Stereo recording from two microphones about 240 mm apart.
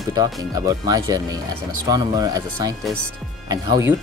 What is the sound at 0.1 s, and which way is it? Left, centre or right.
Speech, centre.